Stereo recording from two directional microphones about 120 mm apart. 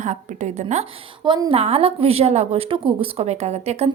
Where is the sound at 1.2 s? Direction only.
40° right (ahead or behind).